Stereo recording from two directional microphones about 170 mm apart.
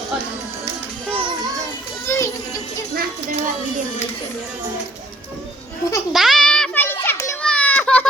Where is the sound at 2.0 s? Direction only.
15° left (ahead or behind).